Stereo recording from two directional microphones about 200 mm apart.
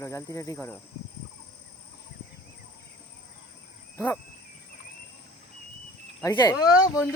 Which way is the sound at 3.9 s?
15° left (ahead or behind).